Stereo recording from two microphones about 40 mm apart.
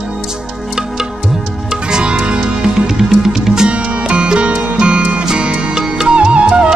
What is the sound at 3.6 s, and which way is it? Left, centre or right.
Music, right.